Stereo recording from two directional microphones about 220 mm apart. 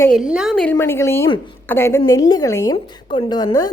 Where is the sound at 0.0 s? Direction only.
Centre (ahead or behind).